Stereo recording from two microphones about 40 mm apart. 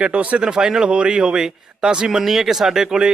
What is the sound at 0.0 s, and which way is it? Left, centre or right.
Speech, right.